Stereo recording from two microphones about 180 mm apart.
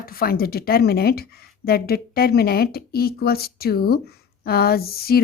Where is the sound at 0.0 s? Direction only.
55° left (ahead or behind).